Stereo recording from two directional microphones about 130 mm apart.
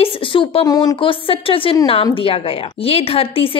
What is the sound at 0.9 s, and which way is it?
A woman's voice, 45° left (ahead or behind).